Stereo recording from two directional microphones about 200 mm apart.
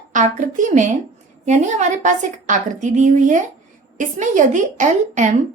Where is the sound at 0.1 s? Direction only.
40° right (ahead or behind).